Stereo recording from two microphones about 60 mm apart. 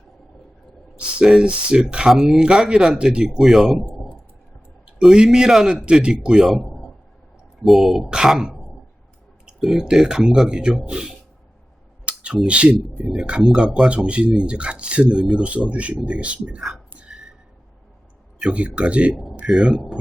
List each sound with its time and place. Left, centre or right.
0.9 s speech: centre
4.9 s speech: centre
6.5 s a sound: centre
7.6 s speech: centre
12.0 s a sound: centre
12.5 s speech: centre
13.4 s speech: centre; by 16.6 s right
16.6 s a sound: centre
18.3 s speech: centre
19.1 s speech: centre
19.5 s speech: centre